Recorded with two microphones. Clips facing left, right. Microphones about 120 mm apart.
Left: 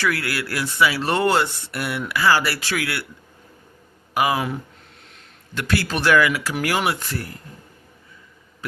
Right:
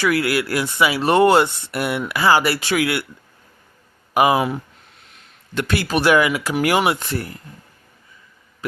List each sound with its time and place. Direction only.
0.0 s speech: 15° right (ahead or behind)
4.1 s speech: 20° right (ahead or behind)
5.5 s speech: 20° right (ahead or behind)